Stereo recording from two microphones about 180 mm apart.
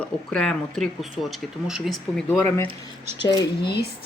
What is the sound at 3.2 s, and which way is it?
Speech, 25° left (ahead or behind).